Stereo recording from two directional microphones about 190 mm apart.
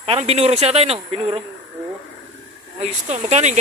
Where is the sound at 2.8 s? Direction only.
35° right (ahead or behind).